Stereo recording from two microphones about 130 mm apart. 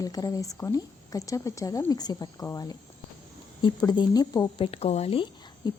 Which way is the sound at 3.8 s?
35° left (ahead or behind).